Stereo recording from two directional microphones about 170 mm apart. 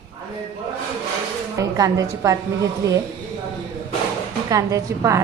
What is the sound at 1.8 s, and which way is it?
A woman's voice, 20° right (ahead or behind).